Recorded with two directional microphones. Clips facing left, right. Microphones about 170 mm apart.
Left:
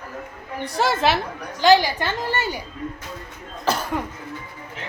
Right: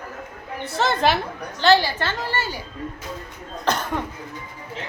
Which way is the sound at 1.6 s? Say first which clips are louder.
Left 2 dB; 15° left (ahead or behind).